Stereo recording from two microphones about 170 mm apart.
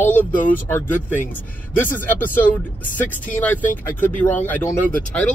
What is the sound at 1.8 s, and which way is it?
Speech, 10° left (ahead or behind).